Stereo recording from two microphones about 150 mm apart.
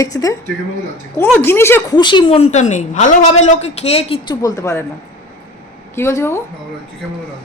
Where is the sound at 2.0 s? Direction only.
30° left (ahead or behind).